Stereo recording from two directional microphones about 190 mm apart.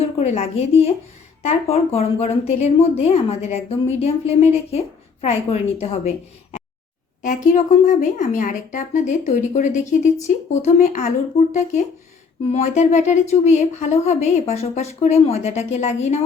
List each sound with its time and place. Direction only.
0.0 s a woman's voice: 35° left (ahead or behind)
7.2 s a woman's voice: 45° left (ahead or behind)